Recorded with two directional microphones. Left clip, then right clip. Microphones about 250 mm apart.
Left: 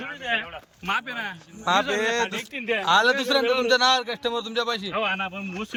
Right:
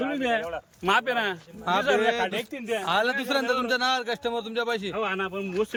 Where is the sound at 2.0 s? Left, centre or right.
Centre.